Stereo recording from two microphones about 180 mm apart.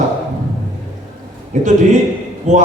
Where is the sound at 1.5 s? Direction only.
40° right (ahead or behind).